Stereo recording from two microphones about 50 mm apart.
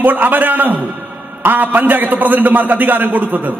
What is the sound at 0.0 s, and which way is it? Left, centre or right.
A man's voice, right.